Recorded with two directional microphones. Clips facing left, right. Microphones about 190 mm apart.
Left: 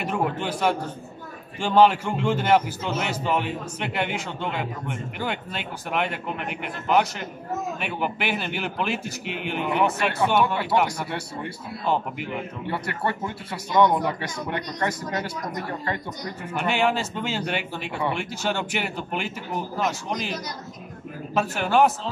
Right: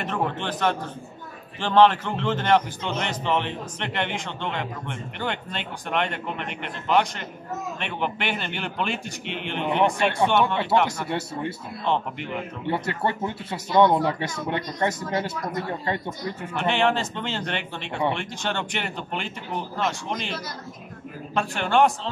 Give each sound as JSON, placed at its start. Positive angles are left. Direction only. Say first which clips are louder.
{"t": 0.0, "sound": "a man's voice", "louder": "left 1 dB", "side_deg": 10}
{"t": 10.4, "sound": "speech", "louder": "right 1 dB", "side_deg": -25}
{"t": 11.8, "sound": "a man's voice", "louder": "even", "side_deg": 5}
{"t": 12.6, "sound": "speech", "louder": "right 3 dB", "side_deg": -20}
{"t": 16.5, "sound": "a man's voice", "louder": "even", "side_deg": 10}
{"t": 21.4, "sound": "a man's voice", "louder": "left 1 dB", "side_deg": 5}